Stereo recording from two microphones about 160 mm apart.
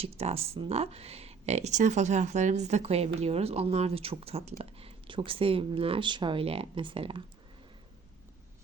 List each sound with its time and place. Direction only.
0.2 s speech: 40° right (ahead or behind)